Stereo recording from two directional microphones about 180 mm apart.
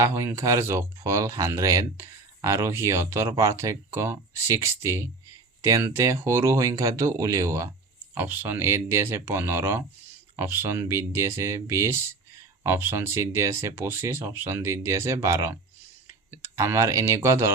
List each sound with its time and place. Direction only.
0.0 s speech: 15° right (ahead or behind)